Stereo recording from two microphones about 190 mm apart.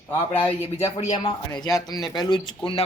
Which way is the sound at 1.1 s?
20° left (ahead or behind).